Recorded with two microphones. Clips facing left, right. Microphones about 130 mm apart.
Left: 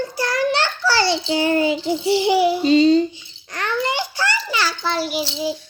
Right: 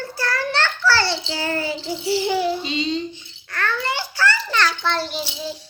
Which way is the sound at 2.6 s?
45° left (ahead or behind).